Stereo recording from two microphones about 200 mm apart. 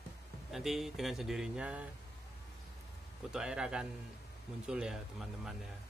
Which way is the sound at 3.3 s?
5° right (ahead or behind).